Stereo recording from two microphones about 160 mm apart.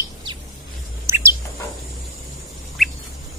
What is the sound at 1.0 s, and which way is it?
Bird, 15° right (ahead or behind).